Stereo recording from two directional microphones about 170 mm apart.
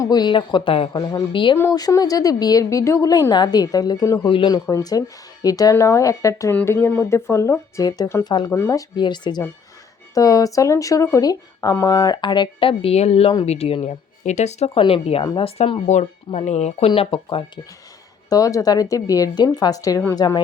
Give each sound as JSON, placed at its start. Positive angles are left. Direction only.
{"t": 0.0, "sound": "speech", "side_deg": 25}
{"t": 9.0, "sound": "speech", "side_deg": 25}
{"t": 18.3, "sound": "speech", "side_deg": 20}